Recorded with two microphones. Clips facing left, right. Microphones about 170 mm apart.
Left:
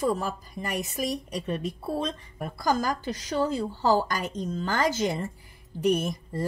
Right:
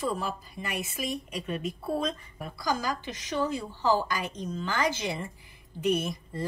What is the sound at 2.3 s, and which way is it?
A woman's voice, 50° left (ahead or behind).